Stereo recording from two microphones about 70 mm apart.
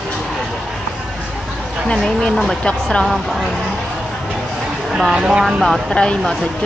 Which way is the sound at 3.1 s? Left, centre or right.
Centre.